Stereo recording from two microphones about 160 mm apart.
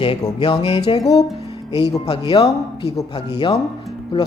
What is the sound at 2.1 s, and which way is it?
Speech, 35° left (ahead or behind).